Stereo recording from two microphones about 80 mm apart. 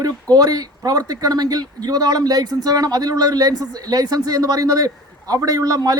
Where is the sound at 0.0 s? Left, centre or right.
Right.